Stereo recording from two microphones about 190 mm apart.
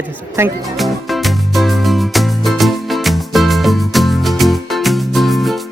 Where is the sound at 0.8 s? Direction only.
Centre (ahead or behind).